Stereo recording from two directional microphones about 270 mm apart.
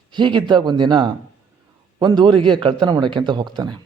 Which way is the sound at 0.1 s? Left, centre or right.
Centre.